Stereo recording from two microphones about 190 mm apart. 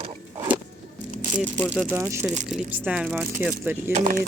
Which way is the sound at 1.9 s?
10° right (ahead or behind).